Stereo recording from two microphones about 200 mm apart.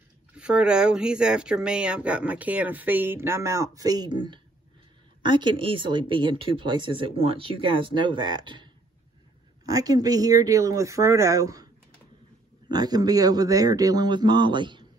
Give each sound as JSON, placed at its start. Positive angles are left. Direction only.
{"t": 0.3, "sound": "speech", "side_deg": -5}
{"t": 9.7, "sound": "speech", "side_deg": -20}
{"t": 12.6, "sound": "speech", "side_deg": -20}